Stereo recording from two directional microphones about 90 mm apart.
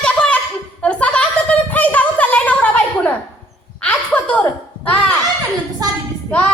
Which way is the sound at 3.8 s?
15° left (ahead or behind).